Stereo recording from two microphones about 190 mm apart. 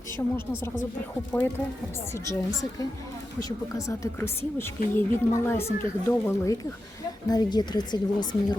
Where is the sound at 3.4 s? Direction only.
15° left (ahead or behind).